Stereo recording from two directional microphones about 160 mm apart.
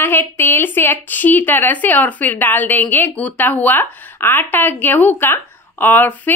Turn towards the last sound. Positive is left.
turn(degrees=10)  # may be behind; listen again after turning